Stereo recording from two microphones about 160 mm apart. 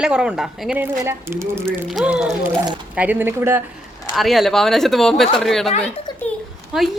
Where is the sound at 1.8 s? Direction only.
5° right (ahead or behind).